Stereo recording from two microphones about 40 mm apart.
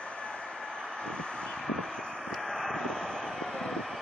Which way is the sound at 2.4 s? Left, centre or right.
Centre.